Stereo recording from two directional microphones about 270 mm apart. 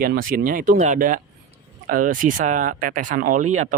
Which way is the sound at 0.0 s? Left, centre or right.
Right.